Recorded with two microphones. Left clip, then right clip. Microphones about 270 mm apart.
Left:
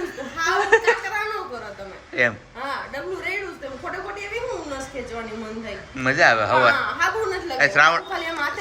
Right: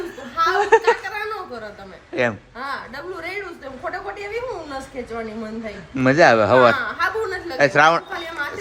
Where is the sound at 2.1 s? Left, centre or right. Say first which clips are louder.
Even; centre.